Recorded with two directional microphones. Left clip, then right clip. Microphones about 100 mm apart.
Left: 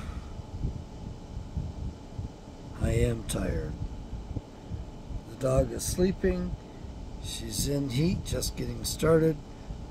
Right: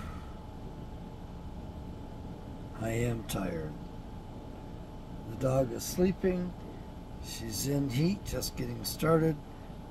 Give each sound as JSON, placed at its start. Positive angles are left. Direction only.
{"t": 2.8, "sound": "speech", "side_deg": 20}
{"t": 5.4, "sound": "speech", "side_deg": 35}
{"t": 7.2, "sound": "speech", "side_deg": 20}